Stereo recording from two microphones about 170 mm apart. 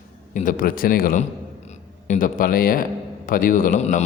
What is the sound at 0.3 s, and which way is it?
A man's voice, 55° left (ahead or behind).